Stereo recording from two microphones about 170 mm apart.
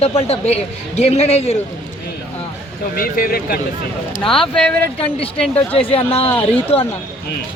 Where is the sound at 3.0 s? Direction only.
60° left (ahead or behind).